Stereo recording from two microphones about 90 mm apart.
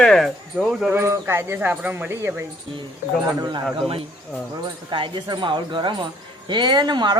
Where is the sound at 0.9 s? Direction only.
25° right (ahead or behind).